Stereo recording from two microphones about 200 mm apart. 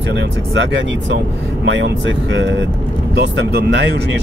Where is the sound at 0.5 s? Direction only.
65° right (ahead or behind).